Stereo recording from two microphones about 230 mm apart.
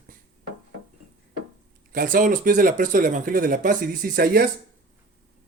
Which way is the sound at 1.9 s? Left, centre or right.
Right.